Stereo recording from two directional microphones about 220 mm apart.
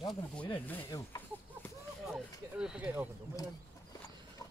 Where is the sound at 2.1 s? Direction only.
5° right (ahead or behind).